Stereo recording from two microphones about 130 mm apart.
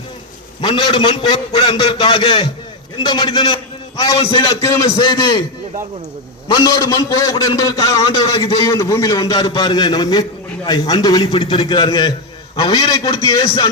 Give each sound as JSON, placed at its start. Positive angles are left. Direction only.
{"t": 0.6, "sound": "a man's voice", "side_deg": 40}
{"t": 6.5, "sound": "a man's voice", "side_deg": 30}
{"t": 8.6, "sound": "a man's voice", "side_deg": 25}